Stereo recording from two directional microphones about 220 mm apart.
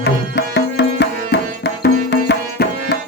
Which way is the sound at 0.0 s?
50° left (ahead or behind).